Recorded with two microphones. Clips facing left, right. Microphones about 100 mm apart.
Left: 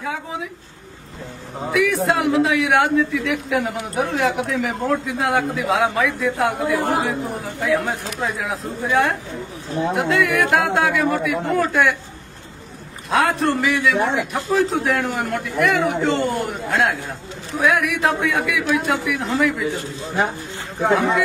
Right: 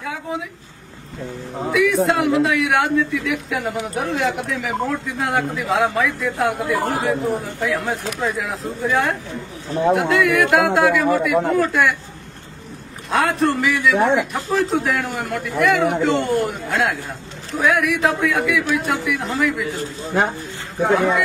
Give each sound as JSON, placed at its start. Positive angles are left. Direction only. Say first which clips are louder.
{"t": 0.0, "sound": "a man's voice", "louder": "right 1 dB", "side_deg": 0}
{"t": 1.7, "sound": "a man's voice", "louder": "right 2 dB", "side_deg": 0}
{"t": 13.1, "sound": "a man's voice", "louder": "even", "side_deg": 0}
{"t": 19.8, "sound": "a man's voice", "louder": "right 2 dB", "side_deg": -40}